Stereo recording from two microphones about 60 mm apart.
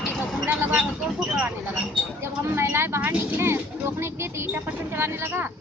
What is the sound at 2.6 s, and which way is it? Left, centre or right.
Speech, right.